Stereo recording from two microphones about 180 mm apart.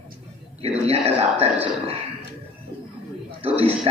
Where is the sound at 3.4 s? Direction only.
30° right (ahead or behind).